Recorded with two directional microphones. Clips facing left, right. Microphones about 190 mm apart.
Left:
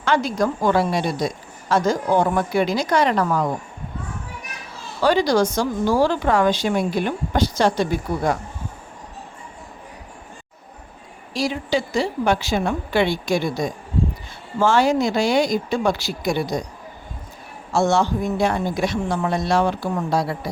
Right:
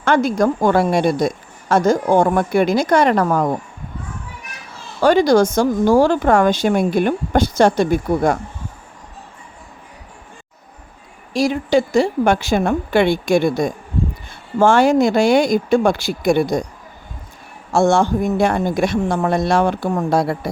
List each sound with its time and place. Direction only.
0.0 s speech: 50° right (ahead or behind)
5.0 s speech: 50° right (ahead or behind)
11.3 s speech: 50° right (ahead or behind)
17.7 s speech: 50° right (ahead or behind)